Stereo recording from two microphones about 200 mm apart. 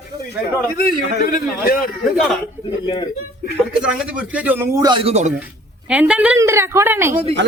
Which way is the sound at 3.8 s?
5° right (ahead or behind).